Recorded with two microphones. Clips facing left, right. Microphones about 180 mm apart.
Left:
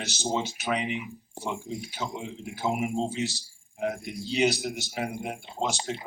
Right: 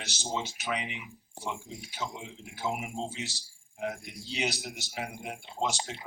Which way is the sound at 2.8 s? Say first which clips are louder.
Left 8 dB; 50° left (ahead or behind).